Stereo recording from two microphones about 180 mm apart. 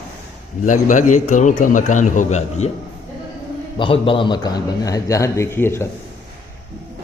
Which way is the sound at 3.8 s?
30° left (ahead or behind).